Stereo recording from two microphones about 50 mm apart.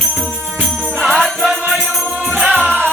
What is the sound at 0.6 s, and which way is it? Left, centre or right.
Music, centre.